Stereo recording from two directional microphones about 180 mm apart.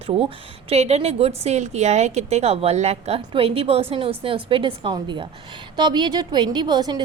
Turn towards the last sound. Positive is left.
turn(degrees=-25)  # may be behind; listen again after turning